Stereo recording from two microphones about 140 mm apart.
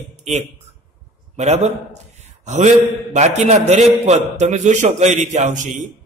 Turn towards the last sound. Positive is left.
turn(degrees=-60)  # may be behind; listen again after turning